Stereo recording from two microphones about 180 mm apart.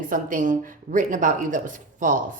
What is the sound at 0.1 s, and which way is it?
Speech, 45° right (ahead or behind).